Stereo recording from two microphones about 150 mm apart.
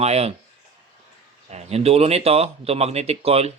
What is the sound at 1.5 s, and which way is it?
Speech, 45° right (ahead or behind).